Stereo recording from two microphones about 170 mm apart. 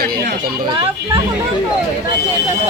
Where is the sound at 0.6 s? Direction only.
25° right (ahead or behind).